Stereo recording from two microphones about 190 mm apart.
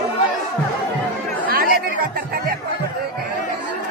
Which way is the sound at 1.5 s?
50° right (ahead or behind).